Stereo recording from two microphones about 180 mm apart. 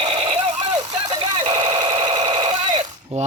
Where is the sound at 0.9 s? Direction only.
30° right (ahead or behind).